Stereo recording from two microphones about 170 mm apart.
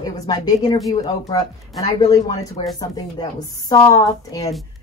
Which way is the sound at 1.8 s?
20° left (ahead or behind).